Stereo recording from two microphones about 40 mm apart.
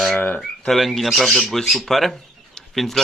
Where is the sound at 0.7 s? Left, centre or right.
Centre.